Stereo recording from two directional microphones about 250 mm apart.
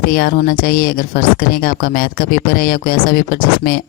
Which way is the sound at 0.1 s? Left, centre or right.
Left.